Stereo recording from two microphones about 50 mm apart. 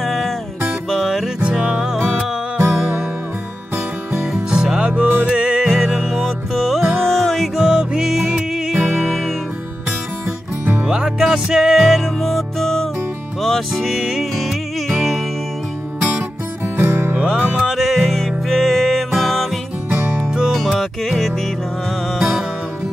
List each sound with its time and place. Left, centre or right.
0.0 s music: centre
1.4 s music: right
4.5 s music: centre
5.0 s music: right
5.3 s music: centre
7.5 s music: centre
10.6 s music: right
10.9 s music: centre
13.9 s music: centre
14.3 s music: centre
16.6 s music: right
17.3 s music: centre
19.9 s music: right
20.2 s music: centre